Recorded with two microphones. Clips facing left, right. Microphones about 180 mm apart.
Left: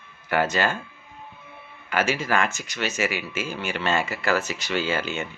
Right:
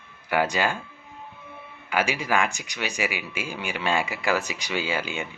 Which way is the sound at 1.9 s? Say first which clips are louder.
Left 1 dB; 10° right (ahead or behind).